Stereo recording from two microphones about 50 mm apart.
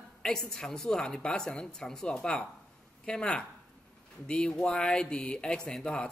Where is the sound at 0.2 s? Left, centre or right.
Centre.